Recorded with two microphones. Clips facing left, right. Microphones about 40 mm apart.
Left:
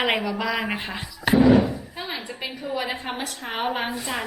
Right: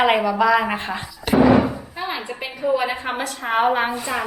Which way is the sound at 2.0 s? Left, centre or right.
Centre.